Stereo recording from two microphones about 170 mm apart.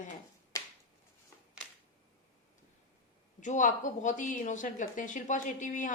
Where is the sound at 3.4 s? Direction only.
45° left (ahead or behind).